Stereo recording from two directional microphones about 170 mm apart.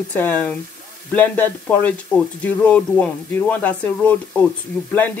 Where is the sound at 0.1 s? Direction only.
10° left (ahead or behind).